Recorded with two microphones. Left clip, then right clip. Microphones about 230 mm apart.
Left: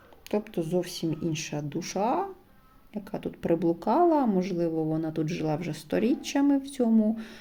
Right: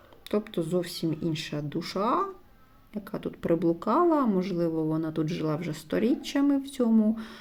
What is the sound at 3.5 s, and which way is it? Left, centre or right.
Speech, left.